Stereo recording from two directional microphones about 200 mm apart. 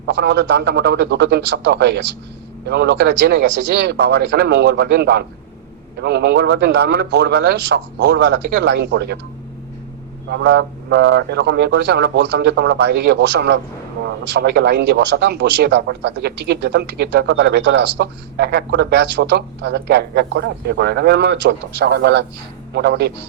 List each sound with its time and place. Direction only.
0.0 s a man's voice: 60° right (ahead or behind)
10.2 s a man's voice: 60° right (ahead or behind)